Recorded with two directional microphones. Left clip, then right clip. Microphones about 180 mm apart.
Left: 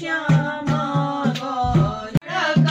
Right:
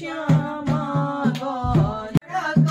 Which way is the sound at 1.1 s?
Centre (ahead or behind).